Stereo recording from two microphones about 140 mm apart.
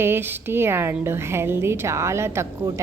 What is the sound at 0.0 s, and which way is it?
A woman's voice, 15° right (ahead or behind).